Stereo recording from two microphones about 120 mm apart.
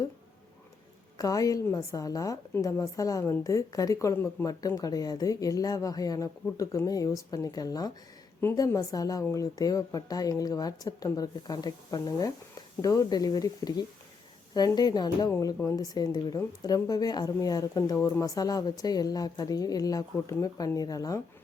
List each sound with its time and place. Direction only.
1.2 s a woman's voice: 30° left (ahead or behind)